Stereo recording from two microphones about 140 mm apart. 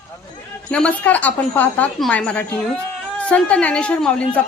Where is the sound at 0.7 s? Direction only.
10° left (ahead or behind).